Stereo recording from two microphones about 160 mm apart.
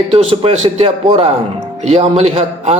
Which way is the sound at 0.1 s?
40° right (ahead or behind).